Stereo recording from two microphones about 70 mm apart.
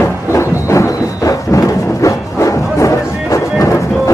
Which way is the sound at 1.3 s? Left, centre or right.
Left.